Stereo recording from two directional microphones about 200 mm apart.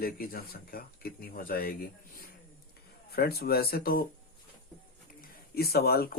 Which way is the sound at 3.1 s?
50° left (ahead or behind).